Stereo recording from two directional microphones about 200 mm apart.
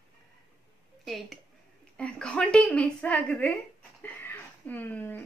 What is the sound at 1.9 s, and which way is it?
A woman's voice, 5° left (ahead or behind).